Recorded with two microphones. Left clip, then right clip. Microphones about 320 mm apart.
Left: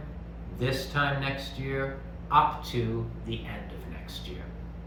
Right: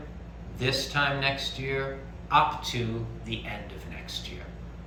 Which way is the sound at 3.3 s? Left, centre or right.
Centre.